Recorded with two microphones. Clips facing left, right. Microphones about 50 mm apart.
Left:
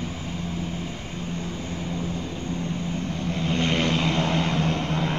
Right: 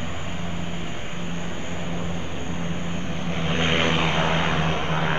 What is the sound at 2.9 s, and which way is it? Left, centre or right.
Vehicle, right.